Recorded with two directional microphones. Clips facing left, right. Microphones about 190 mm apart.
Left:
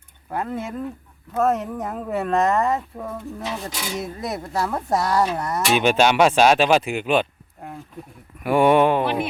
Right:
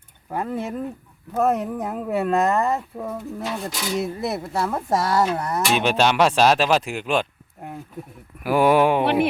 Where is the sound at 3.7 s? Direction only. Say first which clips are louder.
Right 2 dB; 10° left (ahead or behind).